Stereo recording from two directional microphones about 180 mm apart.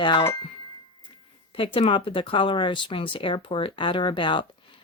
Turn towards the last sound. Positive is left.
turn(degrees=25)  # may be behind; listen again after turning